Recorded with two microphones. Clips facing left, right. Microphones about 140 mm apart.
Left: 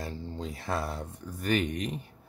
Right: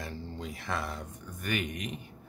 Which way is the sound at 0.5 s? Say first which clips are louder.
Left 3 dB; 30° left (ahead or behind).